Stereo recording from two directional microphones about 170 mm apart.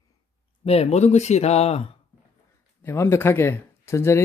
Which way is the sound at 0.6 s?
35° left (ahead or behind).